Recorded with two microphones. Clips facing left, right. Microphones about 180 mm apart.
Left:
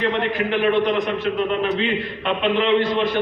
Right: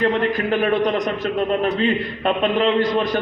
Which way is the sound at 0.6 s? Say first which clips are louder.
Left 2 dB; 40° right (ahead or behind).